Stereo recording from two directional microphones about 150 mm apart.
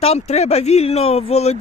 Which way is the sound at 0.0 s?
45° left (ahead or behind).